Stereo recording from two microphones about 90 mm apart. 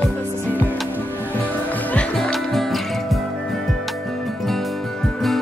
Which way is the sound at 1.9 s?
15° left (ahead or behind).